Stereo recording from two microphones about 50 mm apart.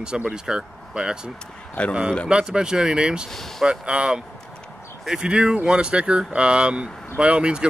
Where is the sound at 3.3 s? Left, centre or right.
Centre.